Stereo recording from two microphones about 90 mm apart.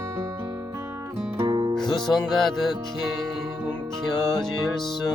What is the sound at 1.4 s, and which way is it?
Music, 50° right (ahead or behind).